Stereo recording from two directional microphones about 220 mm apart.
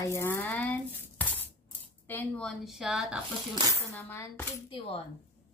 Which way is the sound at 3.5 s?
15° right (ahead or behind).